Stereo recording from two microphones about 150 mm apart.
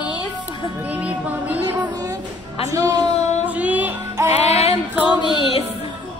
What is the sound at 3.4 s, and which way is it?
Music, 10° right (ahead or behind).